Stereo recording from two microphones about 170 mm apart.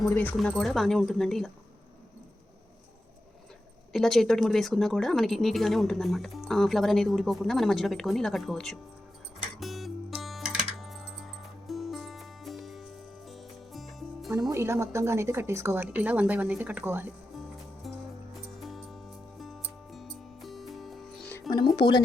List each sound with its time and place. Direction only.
0.1 s speech: 10° left (ahead or behind)
3.9 s speech: centre (ahead or behind)
9.6 s music: centre (ahead or behind)
14.5 s a woman's voice: 15° right (ahead or behind)
17.8 s music: centre (ahead or behind)
21.5 s speech: 25° left (ahead or behind)